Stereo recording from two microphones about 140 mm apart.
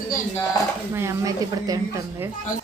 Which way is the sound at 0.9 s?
20° right (ahead or behind).